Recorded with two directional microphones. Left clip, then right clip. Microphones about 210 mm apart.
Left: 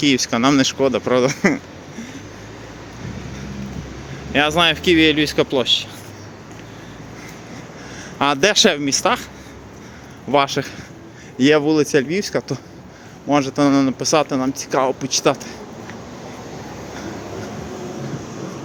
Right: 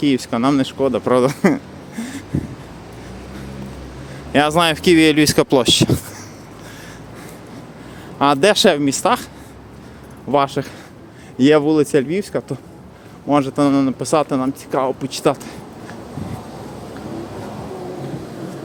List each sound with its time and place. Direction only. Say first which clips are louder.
0.0 s speech: left 1 dB; 10° right (ahead or behind)
4.3 s speech: right 1 dB; 25° right (ahead or behind); by 6.0 s 40° right (ahead or behind)
8.2 s speech: right 2 dB; 10° right (ahead or behind)
10.3 s speech: even; 10° right (ahead or behind)